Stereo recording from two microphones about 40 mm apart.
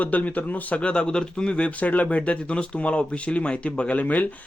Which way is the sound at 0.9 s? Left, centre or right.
Left.